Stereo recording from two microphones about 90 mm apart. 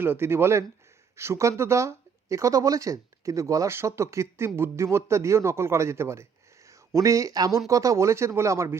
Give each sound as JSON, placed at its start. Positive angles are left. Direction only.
{"t": 0.0, "sound": "speech", "side_deg": -25}